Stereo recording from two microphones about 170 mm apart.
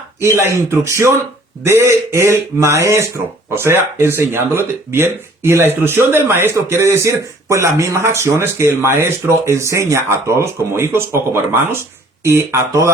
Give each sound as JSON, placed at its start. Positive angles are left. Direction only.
{"t": 0.2, "sound": "speech", "side_deg": -15}